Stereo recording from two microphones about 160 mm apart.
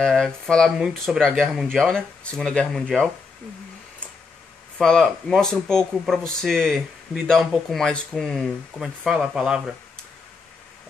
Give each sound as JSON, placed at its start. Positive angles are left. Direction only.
{"t": 0.0, "sound": "speech", "side_deg": 5}
{"t": 4.7, "sound": "speech", "side_deg": 5}